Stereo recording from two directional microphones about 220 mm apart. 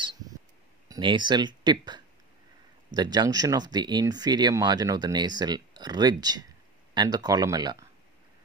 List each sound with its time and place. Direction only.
0.8 s speech: 20° right (ahead or behind)